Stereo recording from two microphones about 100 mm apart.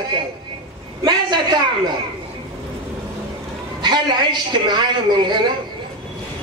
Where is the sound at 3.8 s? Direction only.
45° right (ahead or behind).